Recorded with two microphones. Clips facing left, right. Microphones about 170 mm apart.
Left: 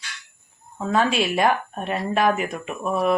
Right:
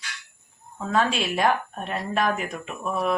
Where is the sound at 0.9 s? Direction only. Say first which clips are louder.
Left 3 dB; 5° left (ahead or behind).